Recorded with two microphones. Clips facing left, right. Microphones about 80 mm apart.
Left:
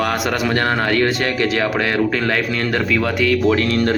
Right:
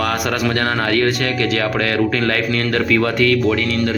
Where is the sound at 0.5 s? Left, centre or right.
Centre.